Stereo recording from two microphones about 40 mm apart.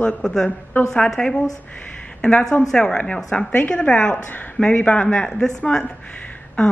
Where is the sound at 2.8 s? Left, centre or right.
Left.